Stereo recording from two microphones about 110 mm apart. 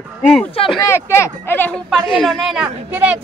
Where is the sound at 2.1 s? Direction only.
5° right (ahead or behind).